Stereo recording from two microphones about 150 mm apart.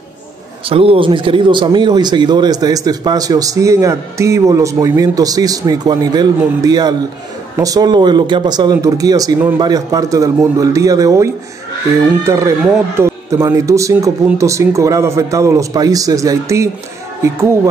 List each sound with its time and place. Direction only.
0.7 s speech: 40° right (ahead or behind); by 11.2 s 20° right (ahead or behind)
12.3 s speech: 20° right (ahead or behind)